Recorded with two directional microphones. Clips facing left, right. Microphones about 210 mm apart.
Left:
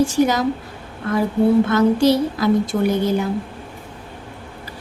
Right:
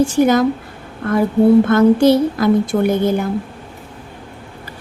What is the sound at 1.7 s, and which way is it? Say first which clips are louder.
A woman's voice: right 4 dB; 55° right (ahead or behind).